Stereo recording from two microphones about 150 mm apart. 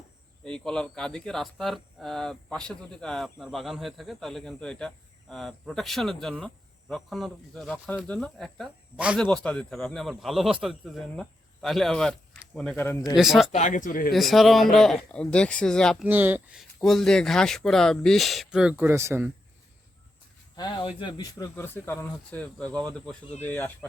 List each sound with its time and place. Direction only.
0.4 s speech: 5° left (ahead or behind)
13.1 s speech: centre (ahead or behind)
13.5 s a man's voice: 55° left (ahead or behind)
14.1 s speech: centre (ahead or behind)
16.0 s speech: 10° right (ahead or behind)
20.6 s speech: 30° left (ahead or behind)
21.5 s speech: 15° left (ahead or behind)